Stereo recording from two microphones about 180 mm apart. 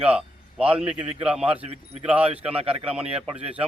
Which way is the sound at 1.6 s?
35° right (ahead or behind).